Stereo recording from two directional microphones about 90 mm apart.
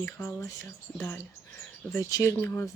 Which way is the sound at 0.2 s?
20° left (ahead or behind).